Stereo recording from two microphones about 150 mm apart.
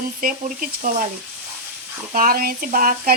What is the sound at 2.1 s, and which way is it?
Speech, 75° right (ahead or behind).